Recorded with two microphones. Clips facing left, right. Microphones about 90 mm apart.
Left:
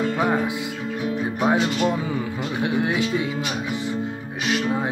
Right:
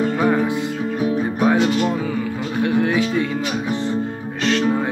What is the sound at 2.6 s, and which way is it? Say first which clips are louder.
Music: right 5 dB; 15° left (ahead or behind).